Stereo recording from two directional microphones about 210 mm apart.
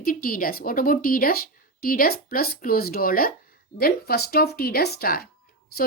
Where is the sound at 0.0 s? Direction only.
40° left (ahead or behind).